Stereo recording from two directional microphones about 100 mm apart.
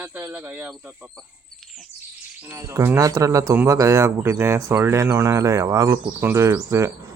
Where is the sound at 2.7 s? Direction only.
30° right (ahead or behind).